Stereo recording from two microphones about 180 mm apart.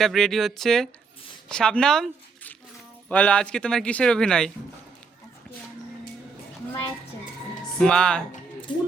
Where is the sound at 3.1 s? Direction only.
5° left (ahead or behind).